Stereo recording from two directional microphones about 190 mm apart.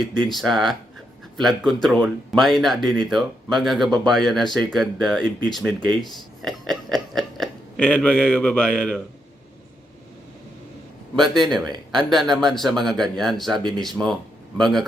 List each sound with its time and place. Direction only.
0.3 s speech: centre (ahead or behind)
11.2 s speech: centre (ahead or behind)
11.6 s speech: 20° right (ahead or behind)
11.9 s speech: centre (ahead or behind)